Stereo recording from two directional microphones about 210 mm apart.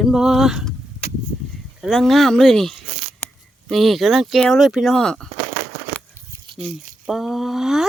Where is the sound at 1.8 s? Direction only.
Centre (ahead or behind).